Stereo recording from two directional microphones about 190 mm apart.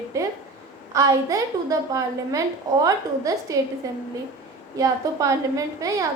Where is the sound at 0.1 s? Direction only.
15° right (ahead or behind).